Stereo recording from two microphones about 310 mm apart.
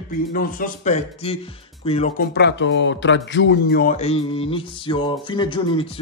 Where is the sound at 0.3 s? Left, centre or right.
Left.